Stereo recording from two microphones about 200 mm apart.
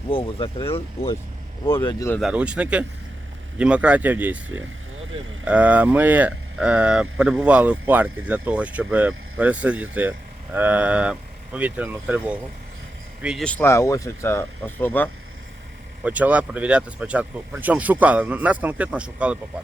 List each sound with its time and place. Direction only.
0.1 s speech: 25° left (ahead or behind)
1.8 s speech: 25° left (ahead or behind)
2.2 s speech: 5° right (ahead or behind)
16.0 s speech: 5° right (ahead or behind)